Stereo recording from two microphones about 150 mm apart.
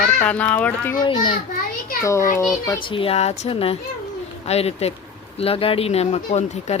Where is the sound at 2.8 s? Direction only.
35° left (ahead or behind).